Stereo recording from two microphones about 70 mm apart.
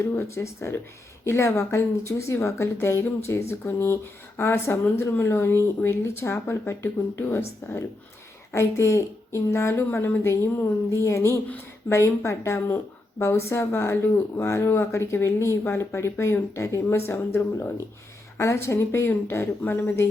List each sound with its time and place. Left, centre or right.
0.0 s speech: left